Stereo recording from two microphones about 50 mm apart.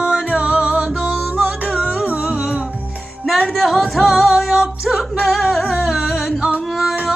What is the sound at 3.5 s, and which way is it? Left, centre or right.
Music, centre.